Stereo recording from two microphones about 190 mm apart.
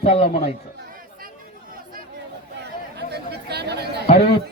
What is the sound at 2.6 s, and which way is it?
Chatter, 60° right (ahead or behind).